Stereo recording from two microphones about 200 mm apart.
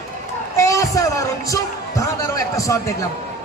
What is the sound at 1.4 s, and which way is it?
Music, 15° left (ahead or behind).